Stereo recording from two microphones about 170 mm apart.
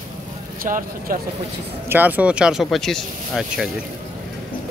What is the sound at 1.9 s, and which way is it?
Speech, 10° right (ahead or behind).